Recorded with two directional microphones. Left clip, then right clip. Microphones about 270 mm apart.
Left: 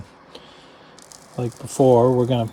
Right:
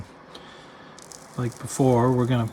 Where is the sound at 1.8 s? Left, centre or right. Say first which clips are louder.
Left 7 dB; left.